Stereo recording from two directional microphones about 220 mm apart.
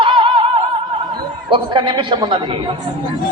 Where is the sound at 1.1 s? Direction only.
20° right (ahead or behind).